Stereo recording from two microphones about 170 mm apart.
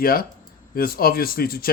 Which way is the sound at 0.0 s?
60° left (ahead or behind).